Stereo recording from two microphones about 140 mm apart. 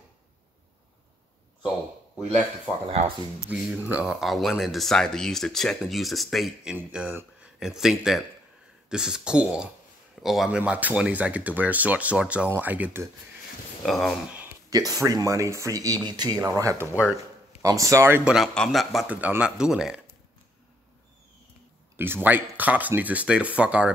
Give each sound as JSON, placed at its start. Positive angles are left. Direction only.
{"t": 2.1, "sound": "speech", "side_deg": -5}
{"t": 13.8, "sound": "speech", "side_deg": 0}
{"t": 14.7, "sound": "speech", "side_deg": -25}
{"t": 16.8, "sound": "speech", "side_deg": 15}
{"t": 17.6, "sound": "speech", "side_deg": -25}
{"t": 18.3, "sound": "speech", "side_deg": 5}
{"t": 21.9, "sound": "speech", "side_deg": -15}